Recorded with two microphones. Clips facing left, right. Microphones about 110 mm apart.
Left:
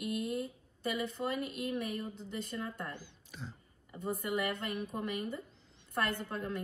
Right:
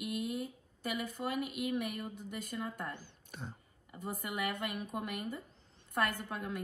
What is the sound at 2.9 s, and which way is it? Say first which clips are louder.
Speech: even; 50° right (ahead or behind).